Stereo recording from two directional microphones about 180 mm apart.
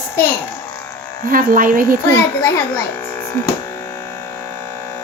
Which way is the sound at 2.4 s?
15° left (ahead or behind).